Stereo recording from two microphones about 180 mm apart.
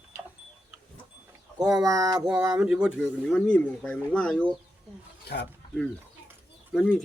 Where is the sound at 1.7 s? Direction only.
20° right (ahead or behind).